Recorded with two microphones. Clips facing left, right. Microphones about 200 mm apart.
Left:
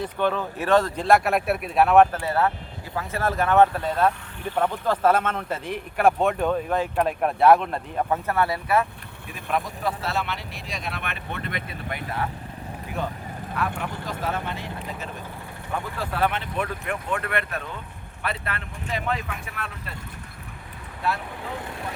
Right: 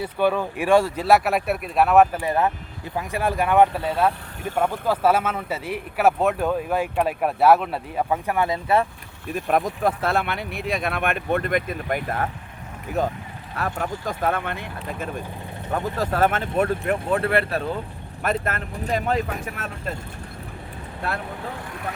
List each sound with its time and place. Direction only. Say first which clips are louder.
0.0 s speech: right 3 dB; 10° right (ahead or behind)
2.2 s speech: right 1 dB; 15° right (ahead or behind)
9.3 s speech: right 6 dB; 50° right (ahead or behind)
16.0 s speech: right 4 dB; 45° right (ahead or behind)
18.2 s speech: right 6 dB; 45° right (ahead or behind)